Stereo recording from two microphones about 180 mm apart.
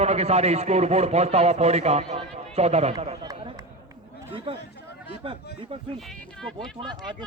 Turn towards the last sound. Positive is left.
turn(degrees=-25)  # may be behind; listen again after turning